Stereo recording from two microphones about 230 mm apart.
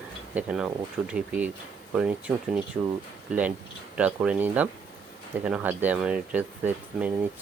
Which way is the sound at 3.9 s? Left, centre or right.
Centre.